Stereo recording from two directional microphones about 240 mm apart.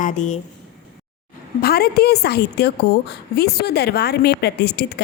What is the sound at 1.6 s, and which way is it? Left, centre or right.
A woman's voice, left.